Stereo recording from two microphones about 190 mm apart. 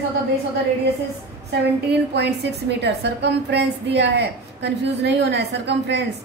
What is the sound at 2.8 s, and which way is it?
A woman's voice, 65° right (ahead or behind).